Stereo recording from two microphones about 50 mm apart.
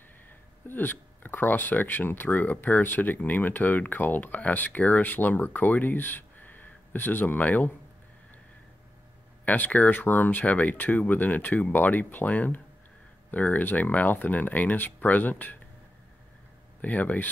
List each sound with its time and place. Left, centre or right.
0.7 s speech: left
9.4 s speech: left
16.8 s speech: left